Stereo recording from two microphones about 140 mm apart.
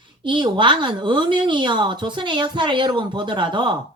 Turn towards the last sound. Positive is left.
turn(degrees=-35)  # may be behind; listen again after turning